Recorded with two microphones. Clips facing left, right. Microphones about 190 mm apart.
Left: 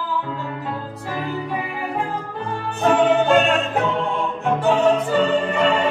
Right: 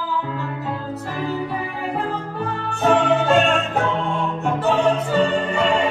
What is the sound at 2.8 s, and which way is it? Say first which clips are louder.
Music: left 1 dB; centre (ahead or behind).